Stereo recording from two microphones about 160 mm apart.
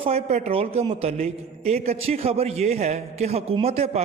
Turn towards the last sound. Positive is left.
turn(degrees=-40)  # may be behind; listen again after turning